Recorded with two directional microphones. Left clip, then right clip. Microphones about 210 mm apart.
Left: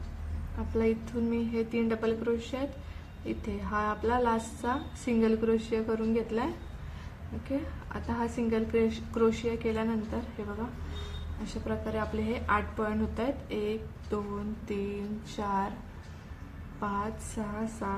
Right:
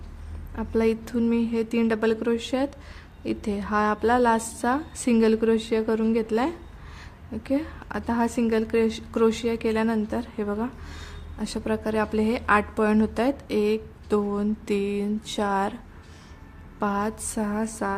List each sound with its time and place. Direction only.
0.8 s a woman's voice: 50° right (ahead or behind)
16.8 s a woman's voice: 50° right (ahead or behind)